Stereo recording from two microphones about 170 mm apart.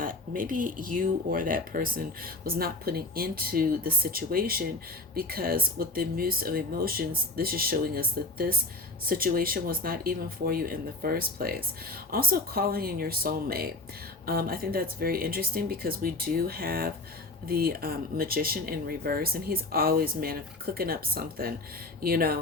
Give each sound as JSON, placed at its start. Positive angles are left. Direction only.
{"t": 0.0, "sound": "speech", "side_deg": -55}